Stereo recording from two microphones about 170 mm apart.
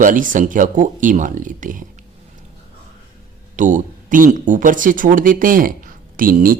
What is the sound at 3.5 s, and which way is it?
Speech, 50° right (ahead or behind).